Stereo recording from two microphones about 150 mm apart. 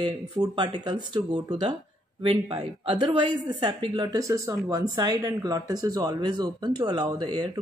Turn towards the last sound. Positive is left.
turn(degrees=-30)  # may be behind; listen again after turning